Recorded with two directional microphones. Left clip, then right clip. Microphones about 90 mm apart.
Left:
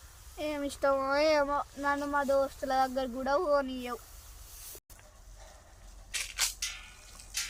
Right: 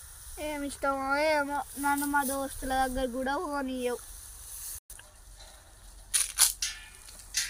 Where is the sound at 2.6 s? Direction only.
40° left (ahead or behind).